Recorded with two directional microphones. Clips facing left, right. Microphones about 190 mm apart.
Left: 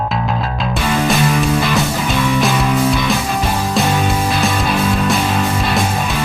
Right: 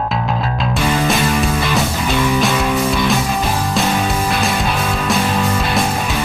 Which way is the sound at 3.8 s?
Centre (ahead or behind).